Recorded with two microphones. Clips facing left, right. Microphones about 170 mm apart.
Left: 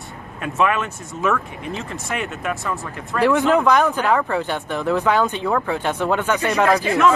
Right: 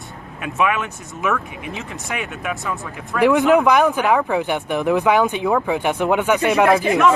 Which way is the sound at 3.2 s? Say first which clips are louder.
Right 2 dB; 15° right (ahead or behind).